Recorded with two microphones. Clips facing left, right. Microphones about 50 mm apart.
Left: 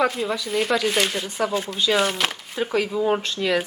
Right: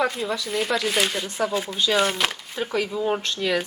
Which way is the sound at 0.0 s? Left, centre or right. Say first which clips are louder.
Left 2 dB; centre.